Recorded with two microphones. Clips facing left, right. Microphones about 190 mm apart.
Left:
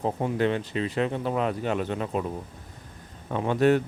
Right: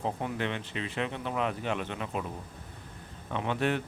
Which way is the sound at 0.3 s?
40° left (ahead or behind).